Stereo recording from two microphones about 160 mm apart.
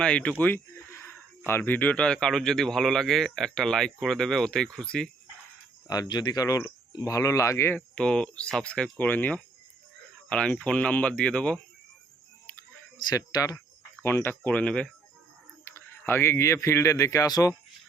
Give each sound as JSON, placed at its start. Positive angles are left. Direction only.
{"t": 0.0, "sound": "speech", "side_deg": 5}
{"t": 5.9, "sound": "speech", "side_deg": 25}
{"t": 13.1, "sound": "speech", "side_deg": 20}